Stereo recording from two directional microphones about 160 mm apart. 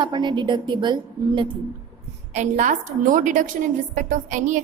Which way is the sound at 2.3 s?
50° right (ahead or behind).